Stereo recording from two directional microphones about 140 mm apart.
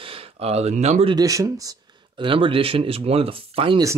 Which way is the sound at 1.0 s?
30° right (ahead or behind).